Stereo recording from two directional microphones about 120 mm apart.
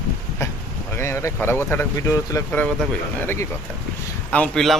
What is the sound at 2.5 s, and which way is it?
Speech, 15° left (ahead or behind).